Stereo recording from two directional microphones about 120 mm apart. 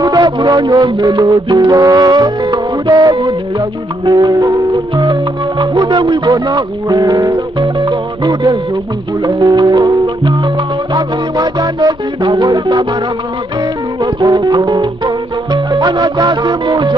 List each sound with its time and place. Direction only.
0.0 s music: 35° right (ahead or behind)
14.0 s music: 35° right (ahead or behind)